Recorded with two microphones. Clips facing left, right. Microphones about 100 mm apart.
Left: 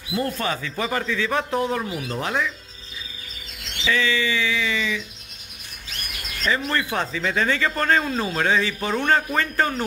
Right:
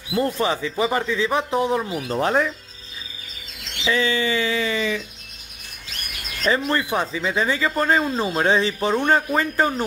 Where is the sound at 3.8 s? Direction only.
30° right (ahead or behind).